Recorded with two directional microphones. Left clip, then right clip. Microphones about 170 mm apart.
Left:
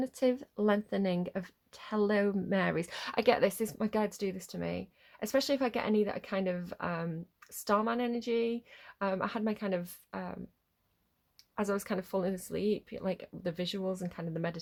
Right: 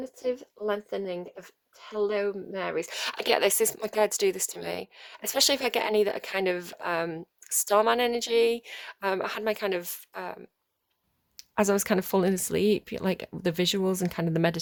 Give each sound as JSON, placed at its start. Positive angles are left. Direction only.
{"t": 0.0, "sound": "speech", "side_deg": -15}
{"t": 3.0, "sound": "speech", "side_deg": -35}